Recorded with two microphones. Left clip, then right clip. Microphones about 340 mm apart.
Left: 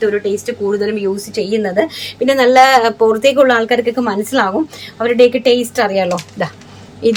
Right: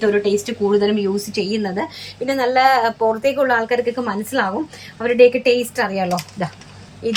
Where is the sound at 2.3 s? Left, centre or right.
Left.